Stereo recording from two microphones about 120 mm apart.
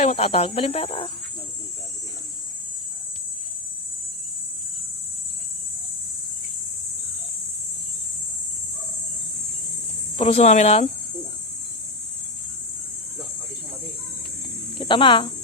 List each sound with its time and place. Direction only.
0.0 s speech: 60° left (ahead or behind)
10.2 s speech: 55° left (ahead or behind)
14.8 s speech: 45° left (ahead or behind)